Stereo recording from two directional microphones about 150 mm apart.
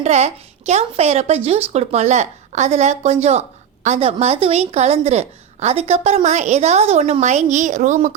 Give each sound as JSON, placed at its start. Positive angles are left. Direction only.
{"t": 0.0, "sound": "a woman's voice", "side_deg": -45}